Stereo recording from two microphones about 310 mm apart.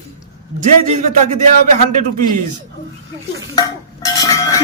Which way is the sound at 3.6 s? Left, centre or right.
Centre.